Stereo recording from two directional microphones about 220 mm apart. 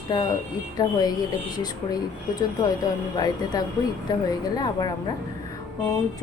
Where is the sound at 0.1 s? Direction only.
20° left (ahead or behind).